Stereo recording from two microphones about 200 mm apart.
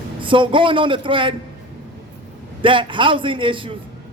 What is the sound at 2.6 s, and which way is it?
Speech, 25° right (ahead or behind).